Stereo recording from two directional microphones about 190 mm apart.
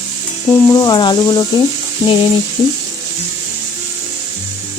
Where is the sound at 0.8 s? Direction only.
20° left (ahead or behind).